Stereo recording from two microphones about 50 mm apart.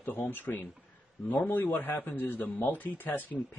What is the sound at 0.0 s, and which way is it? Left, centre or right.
Speech, left.